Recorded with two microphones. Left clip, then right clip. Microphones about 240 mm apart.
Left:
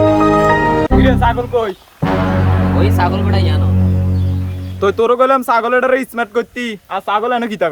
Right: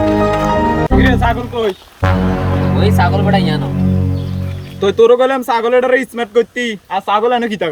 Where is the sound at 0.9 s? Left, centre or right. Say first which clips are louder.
Even; centre.